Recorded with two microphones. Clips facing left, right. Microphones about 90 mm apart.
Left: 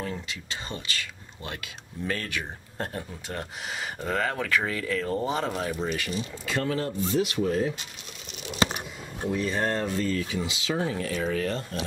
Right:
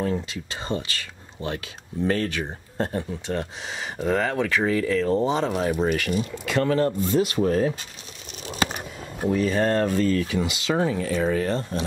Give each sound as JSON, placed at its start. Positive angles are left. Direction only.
{"t": 0.0, "sound": "speech", "side_deg": -30}
{"t": 5.7, "sound": "speech", "side_deg": -55}
{"t": 9.2, "sound": "speech", "side_deg": -55}
{"t": 11.2, "sound": "speech", "side_deg": -30}